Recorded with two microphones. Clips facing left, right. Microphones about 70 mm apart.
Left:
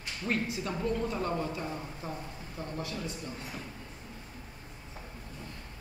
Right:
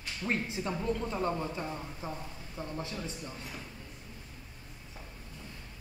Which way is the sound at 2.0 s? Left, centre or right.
Right.